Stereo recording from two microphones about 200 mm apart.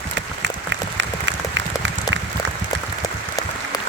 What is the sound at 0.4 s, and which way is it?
Applause, 65° right (ahead or behind).